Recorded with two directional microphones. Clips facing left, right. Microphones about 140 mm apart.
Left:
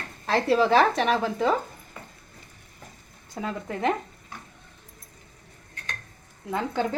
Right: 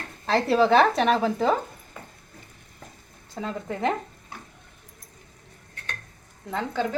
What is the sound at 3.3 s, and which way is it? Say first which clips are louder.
Speech: even; centre (ahead or behind).